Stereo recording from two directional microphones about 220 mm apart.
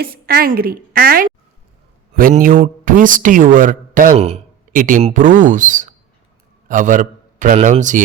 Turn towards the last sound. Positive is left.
turn(degrees=-35)  # may be behind; listen again after turning